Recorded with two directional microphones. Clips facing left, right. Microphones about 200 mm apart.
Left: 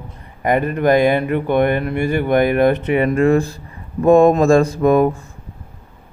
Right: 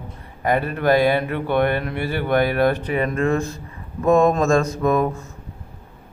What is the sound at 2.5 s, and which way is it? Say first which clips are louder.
Speech: left 4 dB; 20° left (ahead or behind).